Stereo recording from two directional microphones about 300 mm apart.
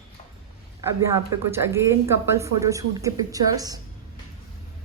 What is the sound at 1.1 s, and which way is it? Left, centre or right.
Speech, centre.